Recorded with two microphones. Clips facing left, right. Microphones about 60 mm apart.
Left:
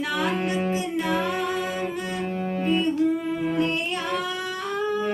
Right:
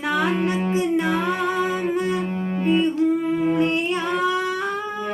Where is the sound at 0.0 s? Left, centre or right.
Right.